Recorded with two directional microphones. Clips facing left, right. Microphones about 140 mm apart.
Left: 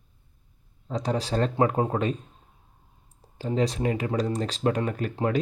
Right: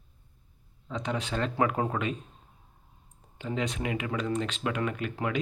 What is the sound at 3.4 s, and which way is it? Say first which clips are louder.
Speech: left 6 dB; 35° left (ahead or behind).